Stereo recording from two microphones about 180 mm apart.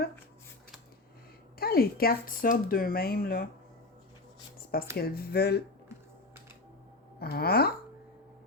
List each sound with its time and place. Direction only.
1.5 s speech: 55° left (ahead or behind)
4.9 s speech: 60° left (ahead or behind)
7.2 s speech: 60° left (ahead or behind)